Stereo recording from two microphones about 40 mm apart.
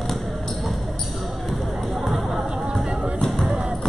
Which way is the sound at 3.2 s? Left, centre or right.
Centre.